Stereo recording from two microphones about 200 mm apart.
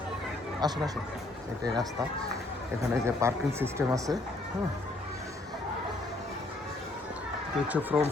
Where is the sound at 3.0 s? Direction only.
15° right (ahead or behind).